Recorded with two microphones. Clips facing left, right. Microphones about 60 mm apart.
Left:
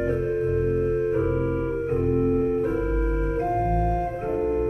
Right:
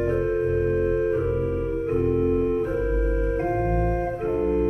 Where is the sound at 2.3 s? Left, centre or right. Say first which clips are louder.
Even; right.